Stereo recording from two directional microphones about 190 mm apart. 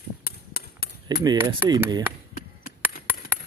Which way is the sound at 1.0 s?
20° right (ahead or behind).